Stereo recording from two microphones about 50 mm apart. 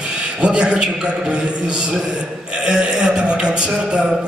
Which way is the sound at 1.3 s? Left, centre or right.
Right.